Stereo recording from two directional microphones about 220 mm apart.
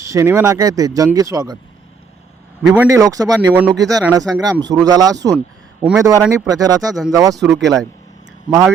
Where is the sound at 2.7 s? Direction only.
10° right (ahead or behind).